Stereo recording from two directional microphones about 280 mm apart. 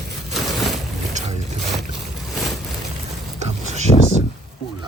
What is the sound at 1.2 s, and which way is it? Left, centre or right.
Vehicle, right.